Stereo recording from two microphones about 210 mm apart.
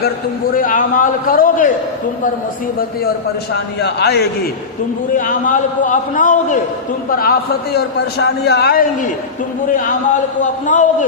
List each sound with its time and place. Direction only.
0.5 s a man's voice: 40° left (ahead or behind)
3.5 s a man's voice: 50° left (ahead or behind)
5.1 s a man's voice: 40° left (ahead or behind)